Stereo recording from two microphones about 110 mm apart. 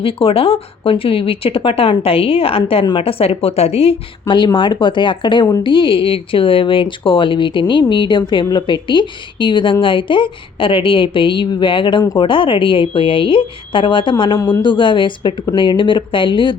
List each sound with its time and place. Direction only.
0.0 s speech: 55° left (ahead or behind)
4.3 s speech: 45° left (ahead or behind)